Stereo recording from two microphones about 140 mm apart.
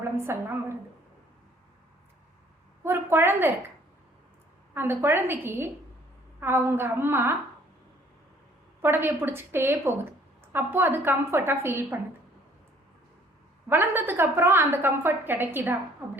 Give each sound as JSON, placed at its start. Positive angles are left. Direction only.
{"t": 0.0, "sound": "a woman's voice", "side_deg": -20}
{"t": 2.8, "sound": "a woman's voice", "side_deg": -15}
{"t": 4.7, "sound": "a woman's voice", "side_deg": -15}
{"t": 8.8, "sound": "a woman's voice", "side_deg": -15}
{"t": 13.7, "sound": "a woman's voice", "side_deg": -15}